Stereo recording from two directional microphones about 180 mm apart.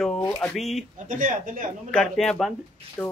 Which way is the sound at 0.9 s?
45° right (ahead or behind).